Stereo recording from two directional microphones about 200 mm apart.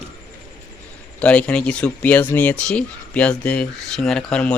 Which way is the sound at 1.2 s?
5° left (ahead or behind).